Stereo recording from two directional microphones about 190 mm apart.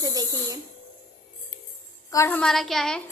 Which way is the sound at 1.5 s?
15° left (ahead or behind).